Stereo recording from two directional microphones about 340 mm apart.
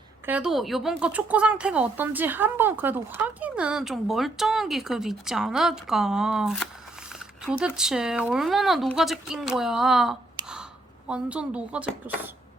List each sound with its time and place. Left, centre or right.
0.3 s speech: centre
10.4 s a sound: centre
11.1 s speech: centre